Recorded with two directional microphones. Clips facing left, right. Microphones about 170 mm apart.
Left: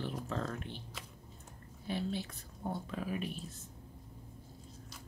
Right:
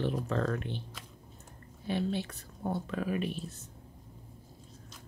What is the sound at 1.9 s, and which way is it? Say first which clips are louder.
Speech: right 5 dB; 70° right (ahead or behind).